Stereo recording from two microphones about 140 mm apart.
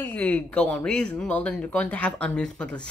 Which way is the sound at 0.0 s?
10° left (ahead or behind).